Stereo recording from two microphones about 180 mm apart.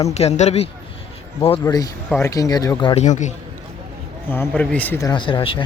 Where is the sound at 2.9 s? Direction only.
40° left (ahead or behind).